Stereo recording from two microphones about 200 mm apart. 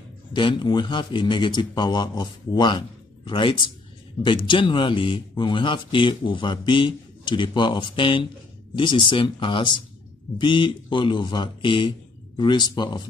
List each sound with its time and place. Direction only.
0.3 s speech: 25° left (ahead or behind)